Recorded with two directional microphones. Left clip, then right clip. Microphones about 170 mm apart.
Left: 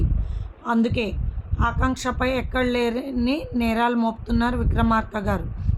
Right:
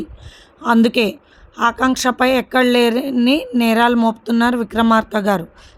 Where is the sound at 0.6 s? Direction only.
65° right (ahead or behind).